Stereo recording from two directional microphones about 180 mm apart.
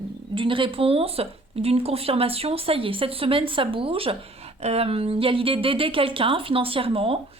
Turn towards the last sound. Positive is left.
turn(degrees=-30)  # may be behind; listen again after turning